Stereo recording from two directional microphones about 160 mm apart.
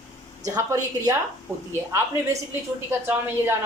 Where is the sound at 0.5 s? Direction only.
20° right (ahead or behind).